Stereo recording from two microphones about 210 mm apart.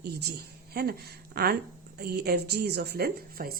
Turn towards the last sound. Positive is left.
turn(degrees=-45)  # may be behind; listen again after turning